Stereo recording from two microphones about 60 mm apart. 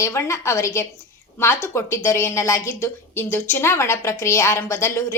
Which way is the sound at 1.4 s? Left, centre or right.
Left.